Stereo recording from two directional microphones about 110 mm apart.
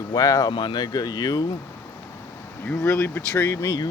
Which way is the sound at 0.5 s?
45° left (ahead or behind).